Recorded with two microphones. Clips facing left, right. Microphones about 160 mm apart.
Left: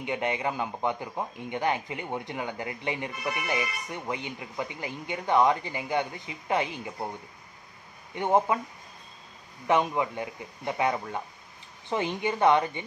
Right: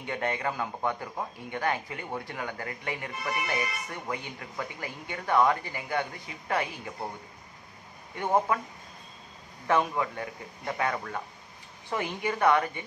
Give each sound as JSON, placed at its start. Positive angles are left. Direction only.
{"t": 0.0, "sound": "speech", "side_deg": 15}
{"t": 8.1, "sound": "speech", "side_deg": 20}
{"t": 9.7, "sound": "speech", "side_deg": 20}